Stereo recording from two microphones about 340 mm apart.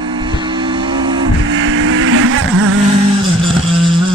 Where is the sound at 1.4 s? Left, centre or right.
Right.